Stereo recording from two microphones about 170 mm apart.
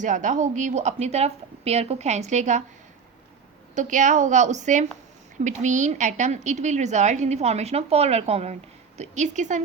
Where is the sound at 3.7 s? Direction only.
45° right (ahead or behind).